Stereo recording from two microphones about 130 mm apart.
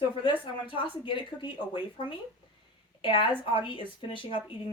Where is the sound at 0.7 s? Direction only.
40° left (ahead or behind).